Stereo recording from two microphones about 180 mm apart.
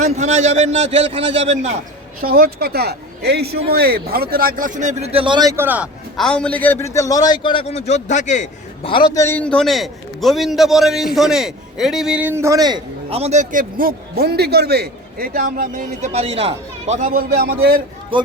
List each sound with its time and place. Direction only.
0.0 s a man's voice: 40° right (ahead or behind)
2.2 s speech: 55° right (ahead or behind); by 5.9 s 10° right (ahead or behind)
6.1 s a man's voice: 5° left (ahead or behind); by 8.9 s 40° left (ahead or behind)
8.9 s a man's voice: 25° left (ahead or behind)
9.2 s a man's voice: 10° left (ahead or behind); by 16.0 s 50° right (ahead or behind)
16.1 s a man's voice: 35° right (ahead or behind)
17.2 s speech: 60° right (ahead or behind)